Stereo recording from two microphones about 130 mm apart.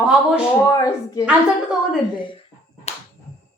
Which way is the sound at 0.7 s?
30° left (ahead or behind).